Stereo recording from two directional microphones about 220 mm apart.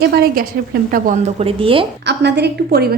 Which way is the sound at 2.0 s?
50° right (ahead or behind).